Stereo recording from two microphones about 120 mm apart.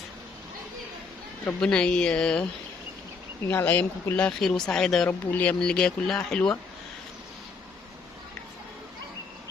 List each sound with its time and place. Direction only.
1.5 s speech: 10° left (ahead or behind)